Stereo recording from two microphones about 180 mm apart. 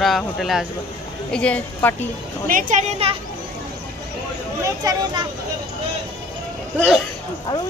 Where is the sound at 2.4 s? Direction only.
50° right (ahead or behind).